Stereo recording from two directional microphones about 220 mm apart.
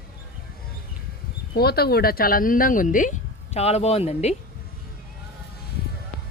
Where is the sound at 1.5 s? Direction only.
45° left (ahead or behind); by 4.3 s 30° left (ahead or behind).